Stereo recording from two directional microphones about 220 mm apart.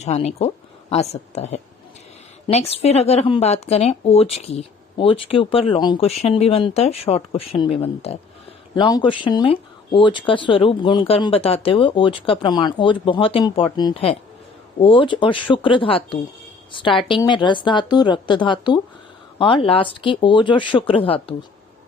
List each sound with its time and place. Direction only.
0.0 s speech: 30° left (ahead or behind)